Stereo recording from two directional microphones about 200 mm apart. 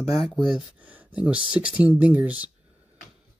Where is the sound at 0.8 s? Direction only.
5° right (ahead or behind).